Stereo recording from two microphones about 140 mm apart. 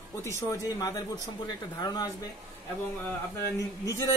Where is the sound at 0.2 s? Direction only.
20° left (ahead or behind).